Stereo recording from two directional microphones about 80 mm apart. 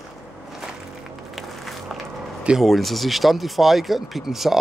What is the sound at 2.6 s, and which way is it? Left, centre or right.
Speech, centre.